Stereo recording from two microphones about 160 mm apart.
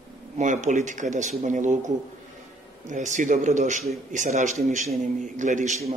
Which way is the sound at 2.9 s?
50° right (ahead or behind).